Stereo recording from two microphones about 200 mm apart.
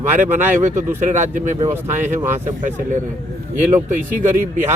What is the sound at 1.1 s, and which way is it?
Speech, 40° right (ahead or behind).